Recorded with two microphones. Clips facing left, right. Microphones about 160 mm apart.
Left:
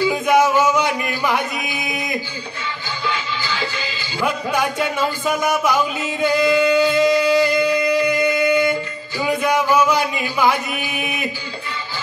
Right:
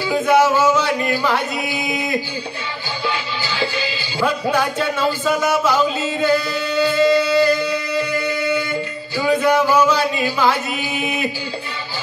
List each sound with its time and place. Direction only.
0.0 s music: 15° left (ahead or behind)
3.8 s music: 15° left (ahead or behind)
9.2 s a sound: 10° left (ahead or behind)